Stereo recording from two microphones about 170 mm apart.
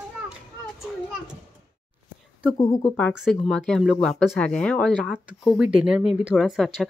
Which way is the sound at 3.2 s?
Centre (ahead or behind).